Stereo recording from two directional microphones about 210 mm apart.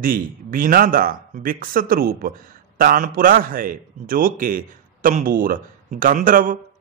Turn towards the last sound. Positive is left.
turn(degrees=-40)  # may be behind; listen again after turning